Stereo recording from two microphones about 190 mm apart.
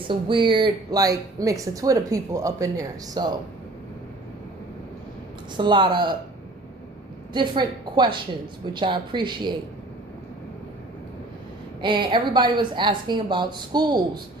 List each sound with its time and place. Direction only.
0.1 s a woman's voice: 25° right (ahead or behind)
5.5 s a woman's voice: 25° right (ahead or behind)
7.3 s a woman's voice: 25° right (ahead or behind)
11.8 s a woman's voice: 25° right (ahead or behind)